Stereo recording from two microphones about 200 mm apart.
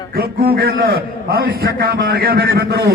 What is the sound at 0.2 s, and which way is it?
A man's voice, 50° right (ahead or behind).